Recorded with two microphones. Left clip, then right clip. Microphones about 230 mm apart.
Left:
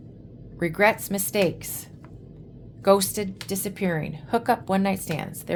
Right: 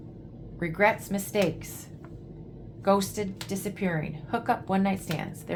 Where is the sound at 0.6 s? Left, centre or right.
Left.